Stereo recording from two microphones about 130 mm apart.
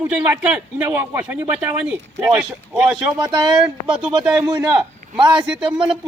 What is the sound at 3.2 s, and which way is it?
Speech, 30° right (ahead or behind).